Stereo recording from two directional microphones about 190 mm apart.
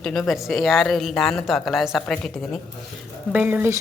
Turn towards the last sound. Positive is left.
turn(degrees=-10)  # may be behind; listen again after turning